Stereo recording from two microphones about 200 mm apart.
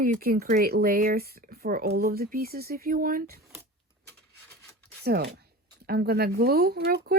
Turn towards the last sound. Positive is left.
turn(degrees=-50)  # may be behind; listen again after turning